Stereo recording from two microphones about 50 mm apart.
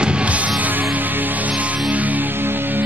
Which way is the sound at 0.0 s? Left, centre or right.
Right.